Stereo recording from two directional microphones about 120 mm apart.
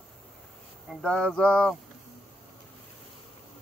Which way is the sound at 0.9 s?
5° left (ahead or behind).